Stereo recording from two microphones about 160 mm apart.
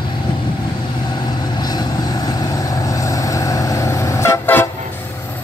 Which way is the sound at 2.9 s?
20° left (ahead or behind).